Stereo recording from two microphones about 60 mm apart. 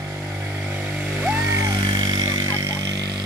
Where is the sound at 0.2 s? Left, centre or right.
Right.